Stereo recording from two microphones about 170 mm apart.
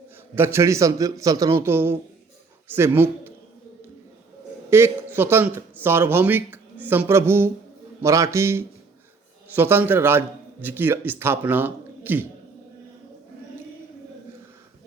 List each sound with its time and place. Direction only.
0.3 s a man's voice: 15° right (ahead or behind)
4.7 s a man's voice: 15° right (ahead or behind)